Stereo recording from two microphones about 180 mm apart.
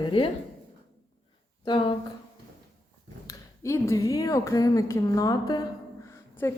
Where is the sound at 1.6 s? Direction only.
25° left (ahead or behind).